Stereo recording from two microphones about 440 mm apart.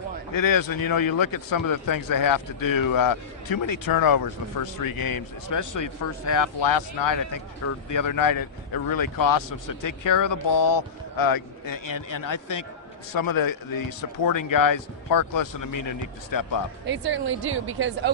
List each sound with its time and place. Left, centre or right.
0.3 s speech: left
16.8 s a woman's voice: right